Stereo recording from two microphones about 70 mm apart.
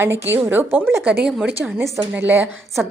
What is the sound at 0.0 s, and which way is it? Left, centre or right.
Speech, right.